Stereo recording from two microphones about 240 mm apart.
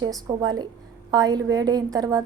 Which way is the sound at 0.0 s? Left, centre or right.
Centre.